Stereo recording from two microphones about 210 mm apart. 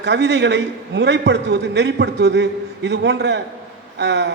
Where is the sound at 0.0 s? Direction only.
55° right (ahead or behind).